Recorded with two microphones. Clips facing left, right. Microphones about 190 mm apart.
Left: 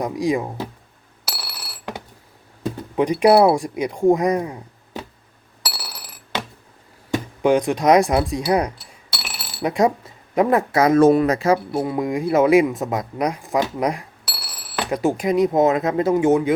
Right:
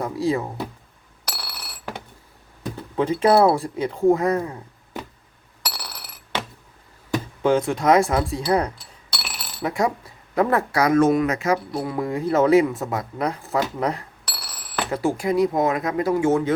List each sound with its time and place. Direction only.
0.0 s speech: 15° left (ahead or behind)
1.2 s a sound: 10° left (ahead or behind)
2.7 s speech: 15° left (ahead or behind)
5.6 s glass: 10° left (ahead or behind)
7.4 s speech: 15° left (ahead or behind); by 11.6 s 35° left (ahead or behind)
11.7 s speech: 15° left (ahead or behind)